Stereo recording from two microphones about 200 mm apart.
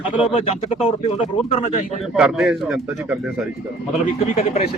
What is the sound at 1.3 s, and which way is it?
Speech, 35° left (ahead or behind).